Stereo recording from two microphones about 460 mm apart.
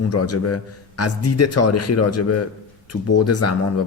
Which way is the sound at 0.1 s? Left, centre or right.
Left.